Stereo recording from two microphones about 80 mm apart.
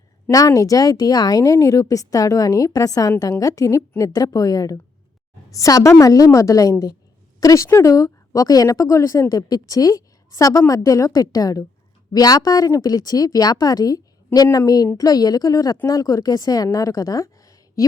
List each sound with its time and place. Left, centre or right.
0.3 s a woman's voice: left
11.1 s a woman's voice: left